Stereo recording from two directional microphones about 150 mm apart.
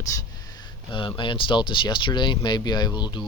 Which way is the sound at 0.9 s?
35° left (ahead or behind).